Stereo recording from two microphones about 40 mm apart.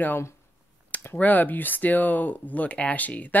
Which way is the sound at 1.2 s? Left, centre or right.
Left.